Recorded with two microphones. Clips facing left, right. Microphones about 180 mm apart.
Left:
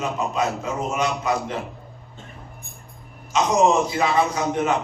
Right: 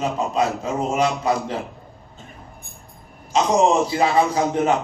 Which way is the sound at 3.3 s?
35° right (ahead or behind).